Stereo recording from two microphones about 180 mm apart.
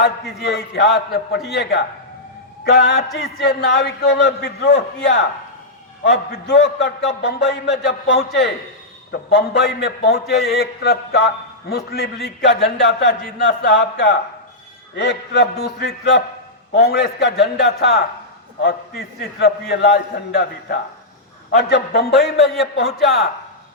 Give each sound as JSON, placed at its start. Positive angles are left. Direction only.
{"t": 0.3, "sound": "a man's voice", "side_deg": 70}
{"t": 19.4, "sound": "a man's voice", "side_deg": 65}